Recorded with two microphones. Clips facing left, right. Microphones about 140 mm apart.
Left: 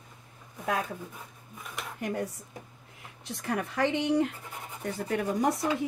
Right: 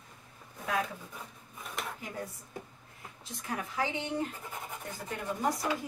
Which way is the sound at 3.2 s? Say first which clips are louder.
Left 6 dB; 65° left (ahead or behind).